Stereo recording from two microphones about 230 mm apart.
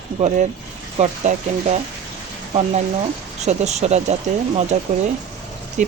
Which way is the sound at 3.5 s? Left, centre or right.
Right.